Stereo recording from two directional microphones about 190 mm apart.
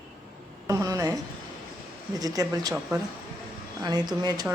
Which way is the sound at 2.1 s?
20° right (ahead or behind).